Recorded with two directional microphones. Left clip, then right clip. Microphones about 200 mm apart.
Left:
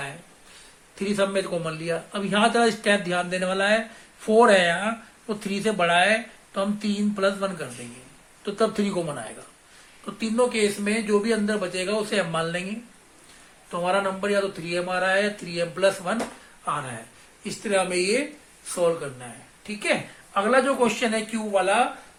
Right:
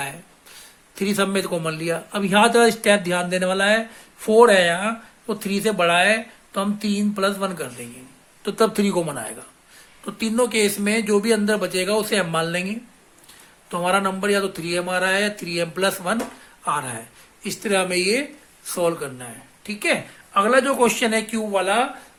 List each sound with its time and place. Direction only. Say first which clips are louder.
0.9 s speech: right 2 dB; 55° right (ahead or behind)